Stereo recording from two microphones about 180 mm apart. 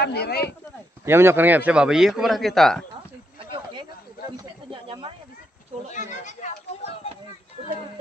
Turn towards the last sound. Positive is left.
turn(degrees=35)  # may be behind; listen again after turning